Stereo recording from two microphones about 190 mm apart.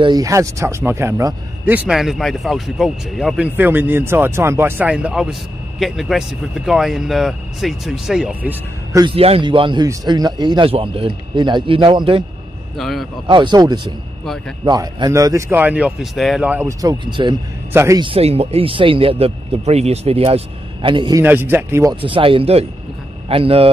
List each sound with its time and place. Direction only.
0.0 s speech: 20° right (ahead or behind)
9.0 s a man's voice: 30° right (ahead or behind)
12.7 s speech: centre (ahead or behind)
13.3 s a man's voice: 25° right (ahead or behind)
18.0 s speech: 30° right (ahead or behind)
21.2 s speech: 10° right (ahead or behind)
22.0 s a man's voice: 25° right (ahead or behind)